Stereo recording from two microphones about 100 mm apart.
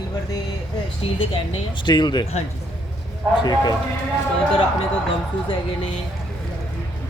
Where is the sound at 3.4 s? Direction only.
45° left (ahead or behind).